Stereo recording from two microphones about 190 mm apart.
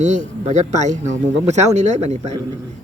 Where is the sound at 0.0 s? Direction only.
40° right (ahead or behind).